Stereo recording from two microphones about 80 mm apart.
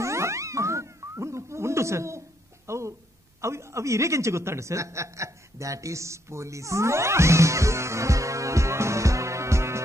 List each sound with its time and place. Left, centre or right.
0.0 s boing: right
3.3 s a man's voice: right